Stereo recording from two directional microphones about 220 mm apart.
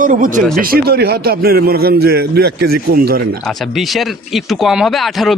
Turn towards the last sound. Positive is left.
turn(degrees=0)  # may be behind; listen again after turning